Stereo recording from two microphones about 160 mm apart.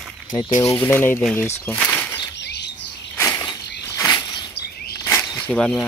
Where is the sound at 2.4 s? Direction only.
90° left.